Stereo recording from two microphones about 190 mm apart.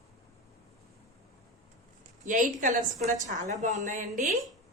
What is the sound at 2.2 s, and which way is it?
A woman's voice, 45° right (ahead or behind).